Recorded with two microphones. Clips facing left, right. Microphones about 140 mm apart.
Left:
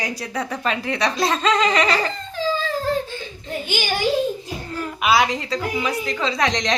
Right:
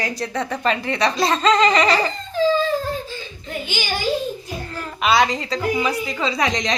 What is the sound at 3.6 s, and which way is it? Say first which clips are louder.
Speech: left 3 dB; 50° left (ahead or behind).